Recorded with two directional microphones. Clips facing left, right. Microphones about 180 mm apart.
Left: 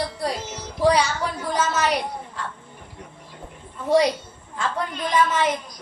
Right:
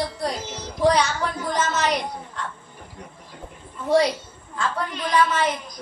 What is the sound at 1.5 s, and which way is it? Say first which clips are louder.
Speech: left 1 dB; 10° left (ahead or behind).